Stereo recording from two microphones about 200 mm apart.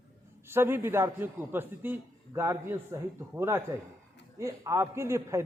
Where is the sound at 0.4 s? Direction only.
10° right (ahead or behind).